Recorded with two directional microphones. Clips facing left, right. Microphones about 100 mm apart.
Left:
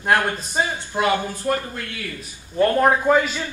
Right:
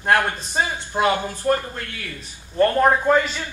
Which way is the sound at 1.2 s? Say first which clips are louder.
Right 2 dB; 15° right (ahead or behind).